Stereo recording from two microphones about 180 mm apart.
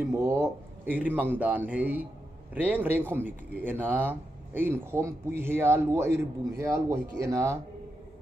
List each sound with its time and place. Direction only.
0.1 s speech: 15° right (ahead or behind)